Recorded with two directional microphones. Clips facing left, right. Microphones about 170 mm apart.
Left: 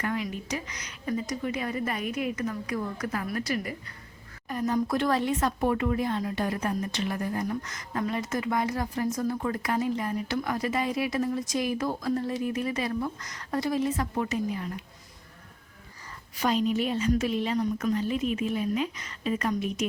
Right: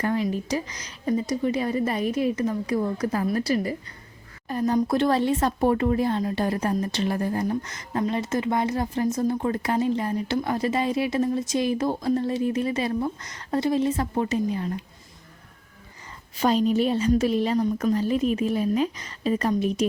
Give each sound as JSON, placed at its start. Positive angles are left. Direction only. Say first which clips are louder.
{"t": 0.0, "sound": "a woman's voice", "louder": "right 6 dB", "side_deg": -35}
{"t": 16.4, "sound": "a woman's voice", "louder": "right 5 dB", "side_deg": -35}